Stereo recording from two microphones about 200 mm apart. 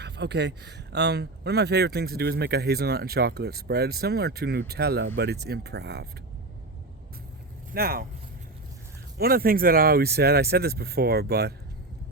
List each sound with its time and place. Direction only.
0.0 s speech: 60° right (ahead or behind)
7.7 s speech: 45° right (ahead or behind)
9.1 s speech: 50° right (ahead or behind)